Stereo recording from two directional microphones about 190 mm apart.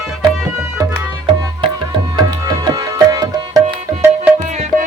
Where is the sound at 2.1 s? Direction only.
25° right (ahead or behind).